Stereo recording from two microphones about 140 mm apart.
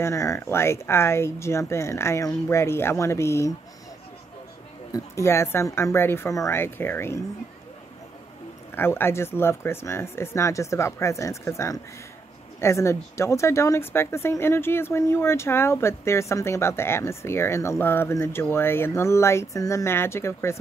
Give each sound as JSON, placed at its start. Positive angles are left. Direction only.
{"t": 0.0, "sound": "speech", "side_deg": 20}
{"t": 4.9, "sound": "speech", "side_deg": 20}
{"t": 8.7, "sound": "speech", "side_deg": 15}